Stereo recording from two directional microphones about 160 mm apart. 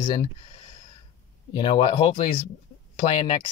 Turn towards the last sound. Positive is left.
turn(degrees=30)  # may be behind; listen again after turning